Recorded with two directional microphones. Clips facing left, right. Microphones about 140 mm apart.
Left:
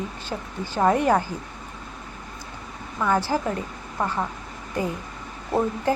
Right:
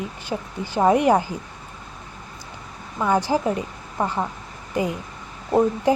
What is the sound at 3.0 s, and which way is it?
Speech, 15° right (ahead or behind).